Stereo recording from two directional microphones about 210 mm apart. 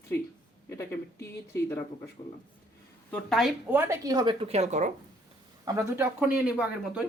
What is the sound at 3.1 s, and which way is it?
Speech, centre (ahead or behind).